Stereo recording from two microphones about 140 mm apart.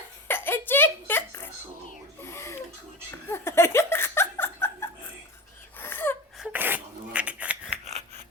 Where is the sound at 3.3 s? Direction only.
20° left (ahead or behind).